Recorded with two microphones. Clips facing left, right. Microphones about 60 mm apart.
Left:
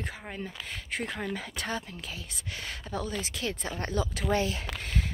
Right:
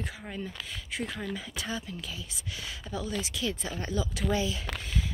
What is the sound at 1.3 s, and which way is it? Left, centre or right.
Speech, left.